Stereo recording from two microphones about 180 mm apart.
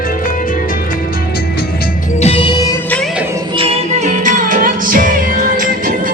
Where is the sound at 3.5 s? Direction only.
30° right (ahead or behind).